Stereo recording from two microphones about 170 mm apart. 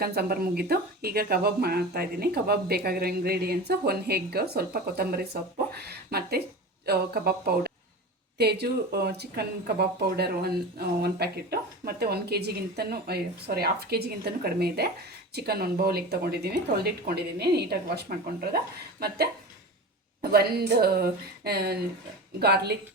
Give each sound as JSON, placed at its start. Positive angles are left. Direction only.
{"t": 0.0, "sound": "speech", "side_deg": -65}
{"t": 20.3, "sound": "speech", "side_deg": -65}